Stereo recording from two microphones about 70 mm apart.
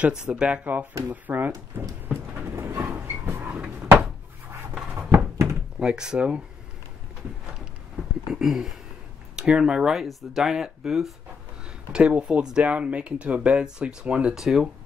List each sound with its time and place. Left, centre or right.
0.1 s speech: centre; by 1.6 s right
2.5 s train: right
4.9 s a sound: right
5.8 s speech: centre
8.3 s speech: centre
11.9 s speech: centre
14.3 s speech: centre